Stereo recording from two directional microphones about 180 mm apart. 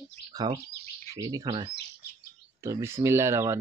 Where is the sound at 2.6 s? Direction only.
15° right (ahead or behind).